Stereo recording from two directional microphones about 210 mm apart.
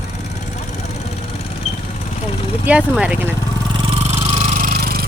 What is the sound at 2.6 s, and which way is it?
Speech, 5° right (ahead or behind).